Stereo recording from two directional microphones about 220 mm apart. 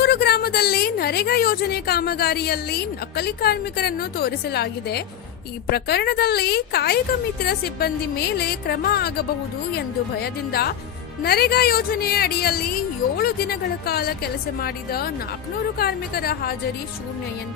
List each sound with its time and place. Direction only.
0.0 s a woman's voice: 45° left (ahead or behind)